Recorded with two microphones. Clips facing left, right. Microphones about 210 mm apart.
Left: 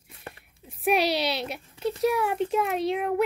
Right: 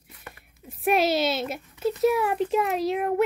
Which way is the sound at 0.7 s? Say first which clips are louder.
Right 2 dB; centre (ahead or behind).